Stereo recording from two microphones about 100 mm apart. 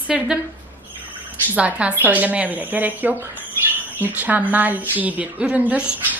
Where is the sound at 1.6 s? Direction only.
10° right (ahead or behind).